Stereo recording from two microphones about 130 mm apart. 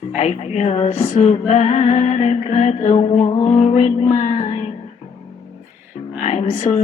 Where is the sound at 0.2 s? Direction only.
60° left (ahead or behind).